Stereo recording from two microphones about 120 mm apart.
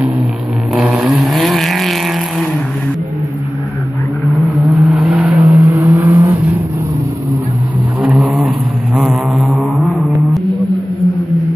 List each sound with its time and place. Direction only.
0.7 s vehicle: centre (ahead or behind)
4.4 s vehicle: centre (ahead or behind)
5.5 s vehicle: 25° right (ahead or behind)
8.0 s a sound: 10° right (ahead or behind)